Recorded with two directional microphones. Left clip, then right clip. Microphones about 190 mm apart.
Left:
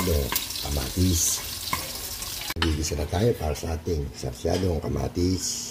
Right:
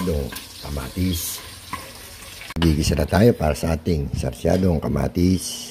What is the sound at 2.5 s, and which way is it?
Speech, 30° right (ahead or behind).